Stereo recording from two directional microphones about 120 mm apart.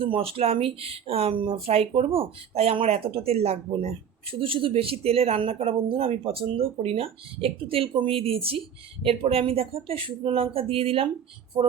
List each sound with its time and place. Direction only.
0.0 s speech: 50° right (ahead or behind)
11.6 s speech: 35° right (ahead or behind)